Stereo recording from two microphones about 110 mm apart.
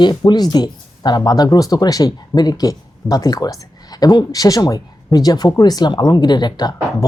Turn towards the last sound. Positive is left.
turn(degrees=40)  # may be behind; listen again after turning